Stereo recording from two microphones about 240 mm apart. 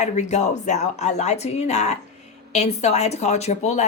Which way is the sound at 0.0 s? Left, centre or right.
Left.